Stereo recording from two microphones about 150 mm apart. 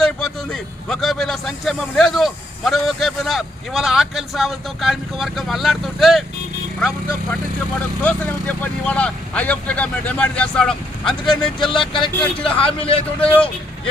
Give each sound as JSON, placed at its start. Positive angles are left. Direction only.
{"t": 0.5, "sound": "a man's voice", "side_deg": 5}
{"t": 11.7, "sound": "speech", "side_deg": 35}
{"t": 13.1, "sound": "speech", "side_deg": 10}